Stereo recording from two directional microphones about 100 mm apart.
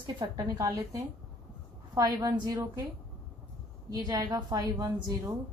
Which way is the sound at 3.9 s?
35° right (ahead or behind).